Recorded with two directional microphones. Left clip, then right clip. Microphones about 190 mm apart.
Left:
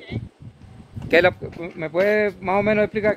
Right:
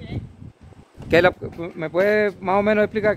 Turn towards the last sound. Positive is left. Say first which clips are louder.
# right 1 dB
turn(degrees=-10)  # may be behind; listen again after turning